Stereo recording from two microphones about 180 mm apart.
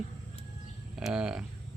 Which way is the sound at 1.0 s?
5° right (ahead or behind).